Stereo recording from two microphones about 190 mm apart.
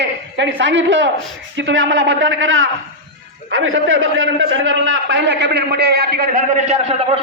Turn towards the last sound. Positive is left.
turn(degrees=-35)  # may be behind; listen again after turning